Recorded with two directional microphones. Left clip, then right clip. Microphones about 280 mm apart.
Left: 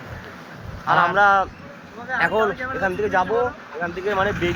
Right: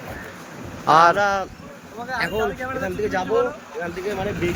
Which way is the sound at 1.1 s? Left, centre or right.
Centre.